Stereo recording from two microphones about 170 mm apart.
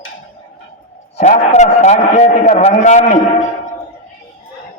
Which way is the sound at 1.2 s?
45° left (ahead or behind).